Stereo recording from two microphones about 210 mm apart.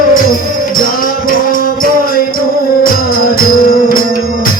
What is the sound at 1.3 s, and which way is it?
Music, 45° left (ahead or behind).